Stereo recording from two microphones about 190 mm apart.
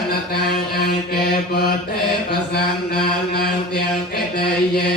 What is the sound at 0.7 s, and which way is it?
Mantra, 55° left (ahead or behind).